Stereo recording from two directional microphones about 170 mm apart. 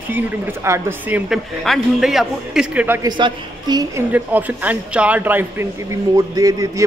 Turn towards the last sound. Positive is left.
turn(degrees=-20)  # may be behind; listen again after turning